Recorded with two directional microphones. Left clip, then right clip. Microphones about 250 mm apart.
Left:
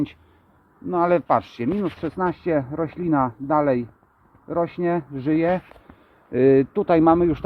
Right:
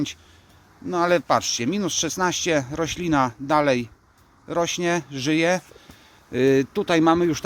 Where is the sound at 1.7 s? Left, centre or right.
Centre.